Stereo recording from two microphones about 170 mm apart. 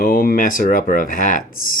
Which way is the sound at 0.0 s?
60° left (ahead or behind).